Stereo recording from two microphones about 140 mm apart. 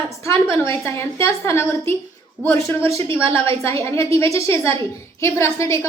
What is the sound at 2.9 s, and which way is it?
Speech, 40° right (ahead or behind).